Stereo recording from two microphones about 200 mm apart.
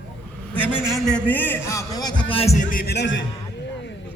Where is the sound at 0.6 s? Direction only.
5° right (ahead or behind); by 3.2 s 60° left (ahead or behind).